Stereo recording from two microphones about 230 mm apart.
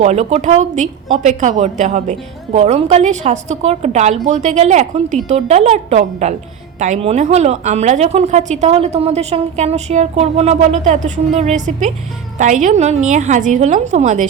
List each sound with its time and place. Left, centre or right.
0.0 s a woman's voice: right